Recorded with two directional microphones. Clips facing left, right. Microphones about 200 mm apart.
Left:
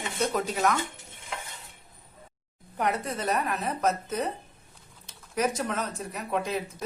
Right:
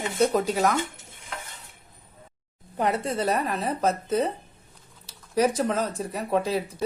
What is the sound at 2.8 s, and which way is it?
Speech, 30° right (ahead or behind).